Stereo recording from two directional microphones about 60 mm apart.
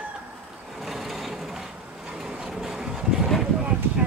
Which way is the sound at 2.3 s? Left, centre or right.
Centre.